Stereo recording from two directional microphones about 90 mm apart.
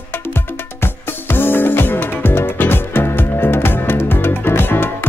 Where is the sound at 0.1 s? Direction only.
25° left (ahead or behind).